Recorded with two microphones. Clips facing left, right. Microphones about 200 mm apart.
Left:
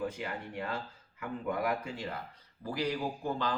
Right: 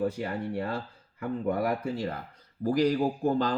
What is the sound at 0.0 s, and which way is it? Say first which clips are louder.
A man's voice: right 7 dB; 35° right (ahead or behind).